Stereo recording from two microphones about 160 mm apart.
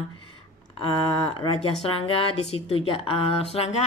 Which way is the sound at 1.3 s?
35° left (ahead or behind).